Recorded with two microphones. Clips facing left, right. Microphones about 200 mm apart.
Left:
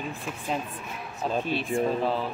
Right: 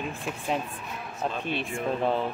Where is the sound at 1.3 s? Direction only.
35° left (ahead or behind).